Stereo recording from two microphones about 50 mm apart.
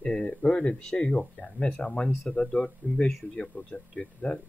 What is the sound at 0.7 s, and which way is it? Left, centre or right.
Speech, centre.